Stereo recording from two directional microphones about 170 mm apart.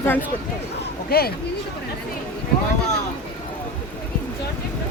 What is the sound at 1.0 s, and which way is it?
Speech, 65° left (ahead or behind).